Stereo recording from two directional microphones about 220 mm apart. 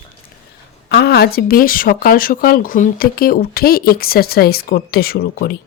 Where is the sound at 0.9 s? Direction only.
45° left (ahead or behind).